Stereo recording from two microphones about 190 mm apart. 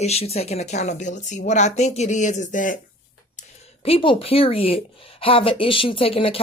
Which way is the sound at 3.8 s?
30° left (ahead or behind).